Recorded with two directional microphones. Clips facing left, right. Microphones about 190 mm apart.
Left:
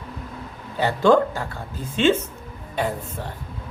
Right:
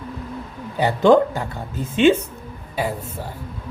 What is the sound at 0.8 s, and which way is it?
A woman's voice, 15° right (ahead or behind).